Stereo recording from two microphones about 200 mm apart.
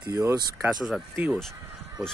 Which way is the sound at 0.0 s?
15° right (ahead or behind).